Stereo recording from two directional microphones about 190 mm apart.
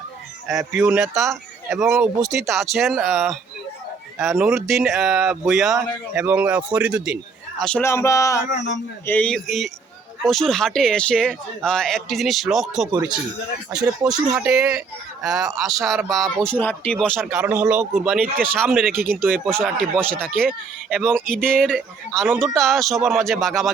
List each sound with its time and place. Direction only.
0.4 s speech: centre (ahead or behind)
1.1 s speech: 15° right (ahead or behind)
1.7 s speech: centre (ahead or behind)
7.6 s speech: 10° left (ahead or behind)